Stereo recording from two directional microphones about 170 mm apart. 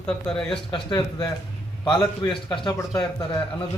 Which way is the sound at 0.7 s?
25° left (ahead or behind).